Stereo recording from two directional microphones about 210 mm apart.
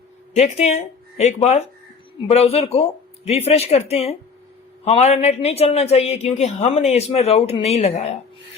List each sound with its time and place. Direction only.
0.3 s a woman's voice: 30° left (ahead or behind)